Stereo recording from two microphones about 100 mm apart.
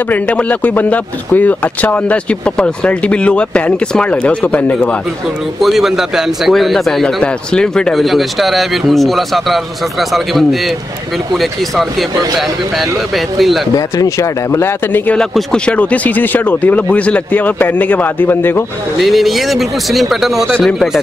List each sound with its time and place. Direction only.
0.1 s speech: 15° left (ahead or behind)
5.6 s a man's voice: centre (ahead or behind)
13.7 s speech: 35° left (ahead or behind)
15.1 s speech: 10° left (ahead or behind)
18.9 s a man's voice: centre (ahead or behind)